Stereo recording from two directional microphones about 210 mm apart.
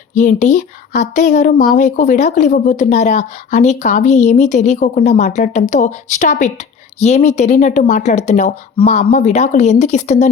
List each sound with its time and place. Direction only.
0.1 s speech: 35° left (ahead or behind)